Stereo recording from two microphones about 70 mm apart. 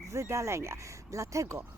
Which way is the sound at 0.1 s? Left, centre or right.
Right.